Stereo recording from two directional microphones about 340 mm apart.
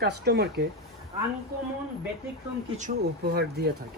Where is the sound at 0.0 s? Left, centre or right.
Right.